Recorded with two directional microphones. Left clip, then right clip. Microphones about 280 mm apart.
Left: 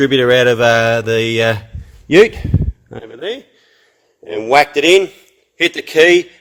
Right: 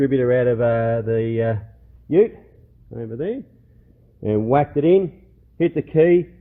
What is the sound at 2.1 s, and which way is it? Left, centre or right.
Speech, left.